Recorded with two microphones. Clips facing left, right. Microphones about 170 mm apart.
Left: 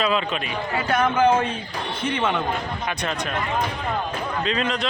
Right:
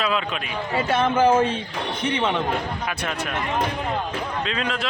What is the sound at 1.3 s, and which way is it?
Speech, 5° right (ahead or behind).